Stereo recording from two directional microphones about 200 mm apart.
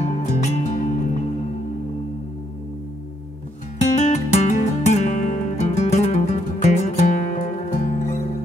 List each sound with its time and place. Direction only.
0.0 s music: 35° left (ahead or behind)
3.8 s music: 35° left (ahead or behind)